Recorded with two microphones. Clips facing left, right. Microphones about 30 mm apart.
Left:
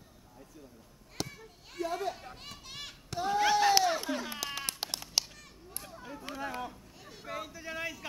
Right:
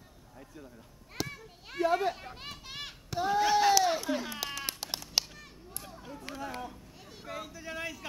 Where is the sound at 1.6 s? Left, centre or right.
Right.